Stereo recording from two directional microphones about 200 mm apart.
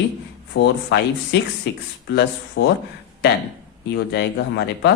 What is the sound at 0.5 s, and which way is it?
Speech, 60° left (ahead or behind).